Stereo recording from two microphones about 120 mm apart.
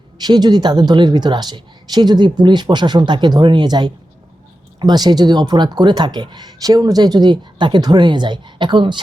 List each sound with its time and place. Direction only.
0.2 s speech: 35° right (ahead or behind)